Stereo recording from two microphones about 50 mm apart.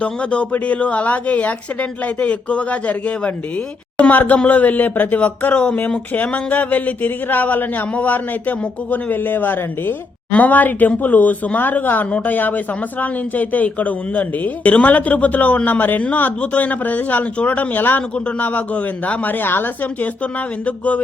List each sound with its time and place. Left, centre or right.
0.0 s speech: left
20.7 s speech: left